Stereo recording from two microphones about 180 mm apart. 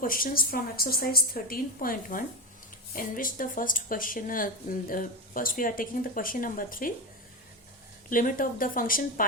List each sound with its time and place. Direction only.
0.0 s speech: 50° left (ahead or behind)
8.1 s speech: 50° left (ahead or behind)